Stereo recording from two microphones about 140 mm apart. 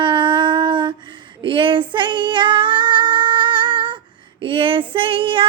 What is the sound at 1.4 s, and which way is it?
Female singing, 35° right (ahead or behind).